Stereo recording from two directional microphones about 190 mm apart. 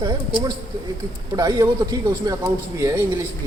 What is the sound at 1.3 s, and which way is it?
A man's voice, 20° right (ahead or behind).